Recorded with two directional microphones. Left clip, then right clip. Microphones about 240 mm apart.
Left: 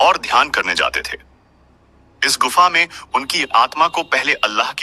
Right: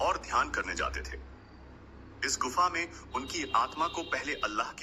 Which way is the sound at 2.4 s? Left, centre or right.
Left.